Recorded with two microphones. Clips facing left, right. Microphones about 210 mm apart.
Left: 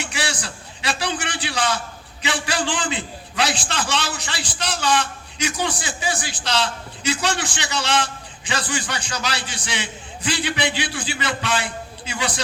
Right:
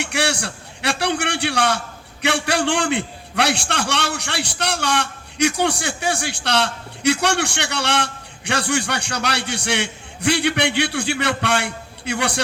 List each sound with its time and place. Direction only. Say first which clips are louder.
0.0 s a man's voice: right 5 dB; 65° right (ahead or behind)